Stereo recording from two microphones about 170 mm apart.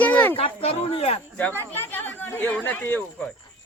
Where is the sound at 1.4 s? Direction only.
10° left (ahead or behind).